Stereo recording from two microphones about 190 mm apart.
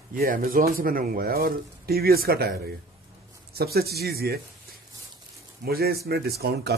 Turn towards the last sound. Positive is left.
turn(degrees=-60)  # may be behind; listen again after turning